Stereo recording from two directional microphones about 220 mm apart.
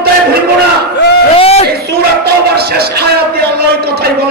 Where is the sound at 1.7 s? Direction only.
45° right (ahead or behind).